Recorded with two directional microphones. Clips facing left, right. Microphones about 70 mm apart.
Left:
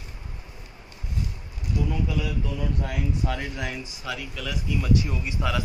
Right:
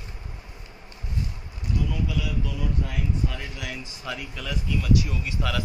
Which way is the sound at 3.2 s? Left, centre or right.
Left.